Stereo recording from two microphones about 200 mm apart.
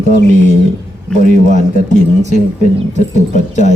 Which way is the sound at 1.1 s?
40° left (ahead or behind).